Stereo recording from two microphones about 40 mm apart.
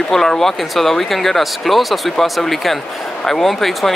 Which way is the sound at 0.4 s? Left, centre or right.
Centre.